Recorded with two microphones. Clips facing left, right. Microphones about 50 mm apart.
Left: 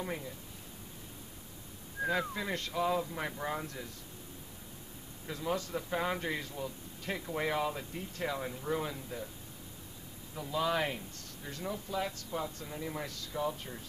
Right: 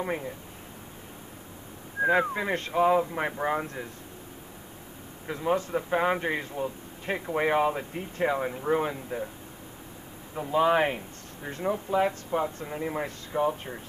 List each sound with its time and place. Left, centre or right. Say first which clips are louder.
0.0 s speech: right 8 dB; right
2.0 s speech: right 9 dB; right
5.2 s speech: right 8 dB; right
10.3 s speech: right 9 dB; right